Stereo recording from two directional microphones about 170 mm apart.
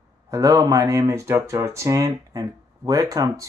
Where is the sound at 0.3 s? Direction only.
20° right (ahead or behind).